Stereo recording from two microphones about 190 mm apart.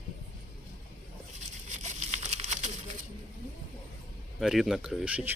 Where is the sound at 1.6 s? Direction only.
35° right (ahead or behind).